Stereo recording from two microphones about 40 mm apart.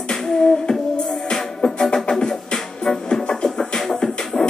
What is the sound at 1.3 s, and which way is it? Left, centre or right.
Music, centre.